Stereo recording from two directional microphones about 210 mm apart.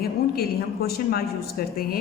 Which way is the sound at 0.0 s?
45° left (ahead or behind).